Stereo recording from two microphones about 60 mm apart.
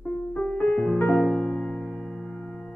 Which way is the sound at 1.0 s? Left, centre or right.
Left.